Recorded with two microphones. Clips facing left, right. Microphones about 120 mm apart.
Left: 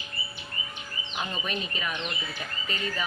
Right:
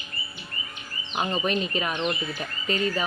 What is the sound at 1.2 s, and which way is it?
Speech, 45° right (ahead or behind).